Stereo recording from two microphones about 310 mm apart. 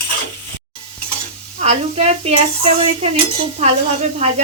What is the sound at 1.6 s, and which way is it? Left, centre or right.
Sizzle, right.